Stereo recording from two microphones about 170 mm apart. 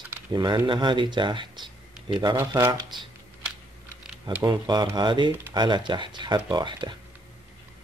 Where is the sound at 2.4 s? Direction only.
15° right (ahead or behind).